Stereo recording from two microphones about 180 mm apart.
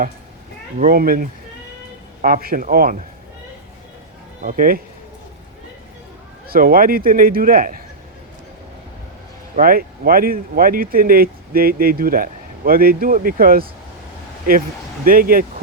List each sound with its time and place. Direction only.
0.8 s speech: 55° right (ahead or behind)
4.4 s speech: 50° right (ahead or behind)
6.5 s speech: 55° right (ahead or behind)
9.6 s speech: 55° right (ahead or behind)
15.0 s speech: 50° right (ahead or behind)